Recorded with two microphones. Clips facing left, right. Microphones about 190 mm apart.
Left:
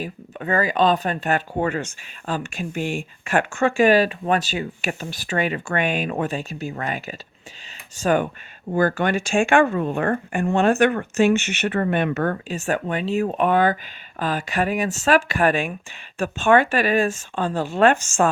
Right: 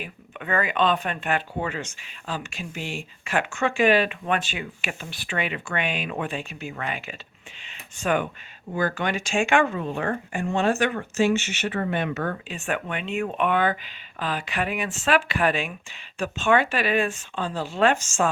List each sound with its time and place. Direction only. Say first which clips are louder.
0.0 s speech: left 6 dB; 35° left (ahead or behind); by 18.3 s 55° left (ahead or behind)